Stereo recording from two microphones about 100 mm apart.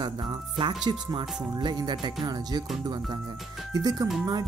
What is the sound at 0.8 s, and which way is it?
Speech, 50° right (ahead or behind).